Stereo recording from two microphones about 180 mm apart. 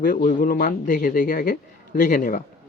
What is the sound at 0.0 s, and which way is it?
Speech, 45° left (ahead or behind).